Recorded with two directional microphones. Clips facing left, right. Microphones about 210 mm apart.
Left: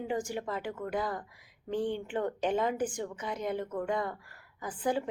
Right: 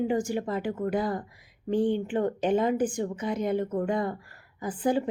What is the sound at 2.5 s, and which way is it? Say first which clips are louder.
A woman's voice: right 6 dB; 25° right (ahead or behind).